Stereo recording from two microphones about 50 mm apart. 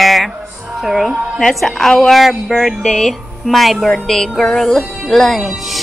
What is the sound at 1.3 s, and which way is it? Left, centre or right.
Music, centre.